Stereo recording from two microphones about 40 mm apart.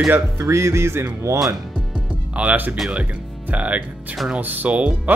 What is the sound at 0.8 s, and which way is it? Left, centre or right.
Speech, right.